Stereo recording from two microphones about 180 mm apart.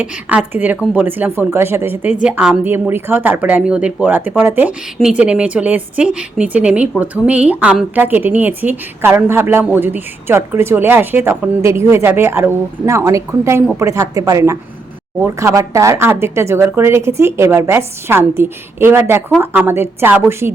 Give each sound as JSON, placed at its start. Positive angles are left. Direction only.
{"t": 0.0, "sound": "a woman's voice", "side_deg": -10}